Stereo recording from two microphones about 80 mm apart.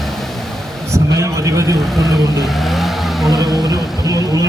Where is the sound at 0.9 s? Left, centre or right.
Right.